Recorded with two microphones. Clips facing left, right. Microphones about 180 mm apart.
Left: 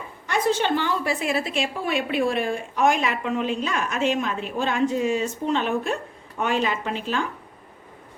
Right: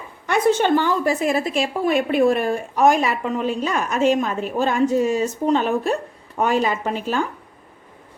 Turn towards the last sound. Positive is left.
turn(degrees=-45)  # may be behind; listen again after turning